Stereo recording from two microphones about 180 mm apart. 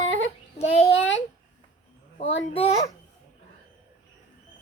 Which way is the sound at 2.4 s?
35° left (ahead or behind).